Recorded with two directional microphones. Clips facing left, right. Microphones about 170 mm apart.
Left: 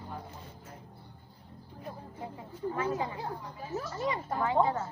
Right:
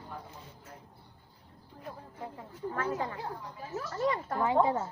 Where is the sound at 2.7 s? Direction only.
15° left (ahead or behind).